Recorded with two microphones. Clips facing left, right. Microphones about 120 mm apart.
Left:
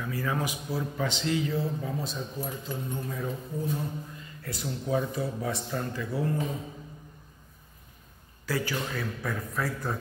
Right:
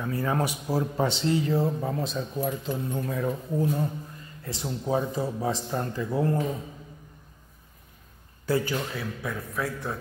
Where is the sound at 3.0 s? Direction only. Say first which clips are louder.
Right 5 dB; 90° right.